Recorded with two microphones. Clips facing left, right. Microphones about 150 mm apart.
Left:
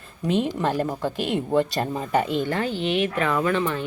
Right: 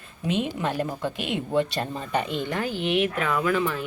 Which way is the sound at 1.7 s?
5° left (ahead or behind).